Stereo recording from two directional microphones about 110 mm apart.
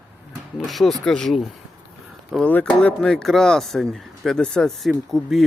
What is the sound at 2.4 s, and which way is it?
Speech, 15° left (ahead or behind).